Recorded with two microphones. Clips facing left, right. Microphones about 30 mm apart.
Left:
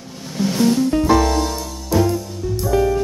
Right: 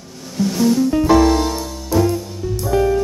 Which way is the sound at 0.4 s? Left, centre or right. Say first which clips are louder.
Right 1 dB; centre.